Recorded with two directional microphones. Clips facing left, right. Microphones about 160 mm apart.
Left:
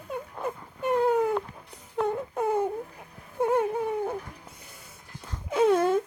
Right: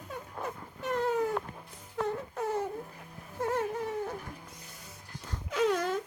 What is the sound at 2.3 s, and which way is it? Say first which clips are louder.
Baby cry: left 8 dB; 55° left (ahead or behind).